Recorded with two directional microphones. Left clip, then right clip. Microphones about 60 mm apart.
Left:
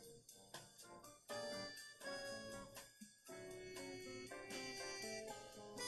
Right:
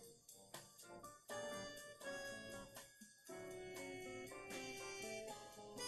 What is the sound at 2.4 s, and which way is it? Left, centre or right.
Guitar, left.